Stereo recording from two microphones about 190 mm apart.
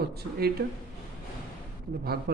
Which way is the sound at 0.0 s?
55° right (ahead or behind).